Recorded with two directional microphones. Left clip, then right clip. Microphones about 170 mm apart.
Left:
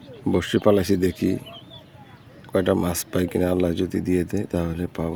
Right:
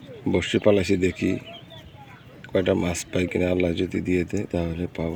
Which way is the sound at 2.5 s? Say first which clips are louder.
Left 1 dB; 20° left (ahead or behind).